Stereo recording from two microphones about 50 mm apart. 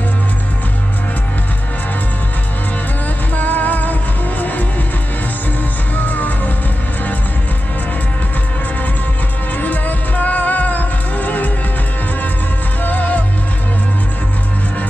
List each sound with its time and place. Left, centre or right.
3.3 s music: left
5.9 s music: left
9.6 s music: left
12.8 s music: left